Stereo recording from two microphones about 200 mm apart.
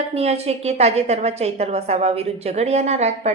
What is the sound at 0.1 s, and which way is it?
A woman's voice, 30° right (ahead or behind).